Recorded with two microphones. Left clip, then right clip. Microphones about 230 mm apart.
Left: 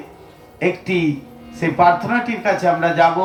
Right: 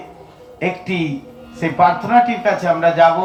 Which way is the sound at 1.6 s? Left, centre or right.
Left.